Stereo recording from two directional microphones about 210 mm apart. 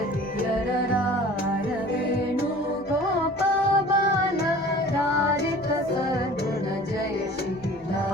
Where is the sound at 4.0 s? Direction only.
50° left (ahead or behind).